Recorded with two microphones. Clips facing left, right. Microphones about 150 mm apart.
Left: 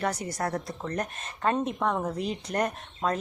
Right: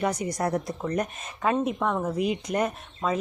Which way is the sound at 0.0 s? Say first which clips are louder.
Right 3 dB; 10° right (ahead or behind).